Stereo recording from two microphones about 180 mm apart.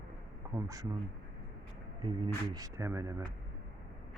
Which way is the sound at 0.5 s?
20° right (ahead or behind).